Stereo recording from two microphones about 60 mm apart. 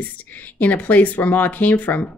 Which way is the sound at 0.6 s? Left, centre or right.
Left.